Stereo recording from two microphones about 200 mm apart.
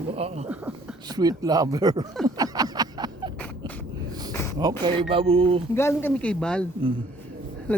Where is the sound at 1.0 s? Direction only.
20° right (ahead or behind).